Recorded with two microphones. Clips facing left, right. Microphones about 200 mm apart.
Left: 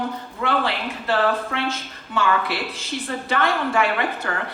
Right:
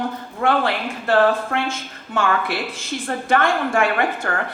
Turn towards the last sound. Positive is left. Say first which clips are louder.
# right 3 dB
turn(degrees=-50)  # may be behind; listen again after turning